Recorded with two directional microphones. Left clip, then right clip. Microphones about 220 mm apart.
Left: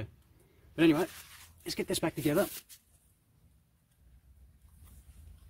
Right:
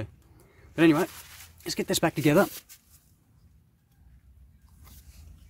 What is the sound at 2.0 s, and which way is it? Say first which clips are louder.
Speech: right 10 dB; 30° right (ahead or behind).